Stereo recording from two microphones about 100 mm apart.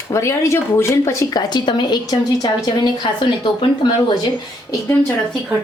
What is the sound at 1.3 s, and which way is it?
Speech, 45° left (ahead or behind).